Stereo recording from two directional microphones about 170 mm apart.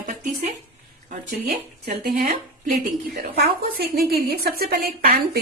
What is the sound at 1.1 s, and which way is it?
Speech, 50° right (ahead or behind).